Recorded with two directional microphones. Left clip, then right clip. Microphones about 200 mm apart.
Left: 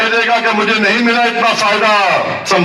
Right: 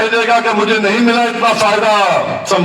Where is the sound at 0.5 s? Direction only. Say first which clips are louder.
Even; 25° left (ahead or behind).